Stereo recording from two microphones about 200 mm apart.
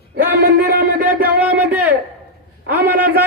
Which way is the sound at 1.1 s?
10° right (ahead or behind).